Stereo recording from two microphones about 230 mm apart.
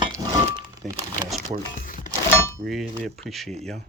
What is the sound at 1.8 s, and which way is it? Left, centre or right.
Music, left.